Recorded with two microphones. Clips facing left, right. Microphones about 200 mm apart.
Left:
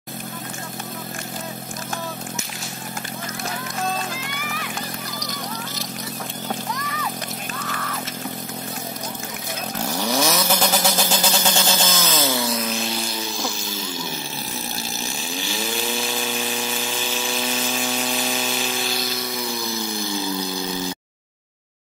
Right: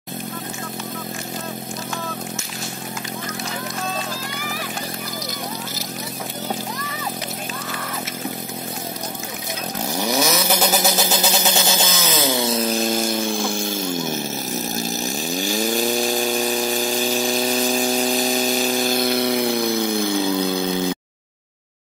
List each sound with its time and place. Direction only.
9.8 s chainsaw: 10° right (ahead or behind)
10.6 s vehicle: 10° right (ahead or behind); by 20.9 s 60° right (ahead or behind)